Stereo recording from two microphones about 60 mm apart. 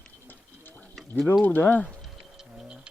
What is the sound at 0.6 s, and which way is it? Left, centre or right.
Mechanisms, left.